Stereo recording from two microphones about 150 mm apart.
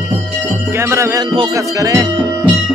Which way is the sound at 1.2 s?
30° right (ahead or behind).